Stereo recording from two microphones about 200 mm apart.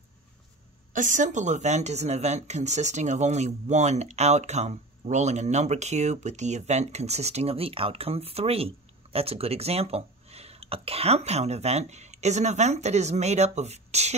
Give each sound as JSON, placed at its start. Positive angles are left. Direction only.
{"t": 0.9, "sound": "speech", "side_deg": -40}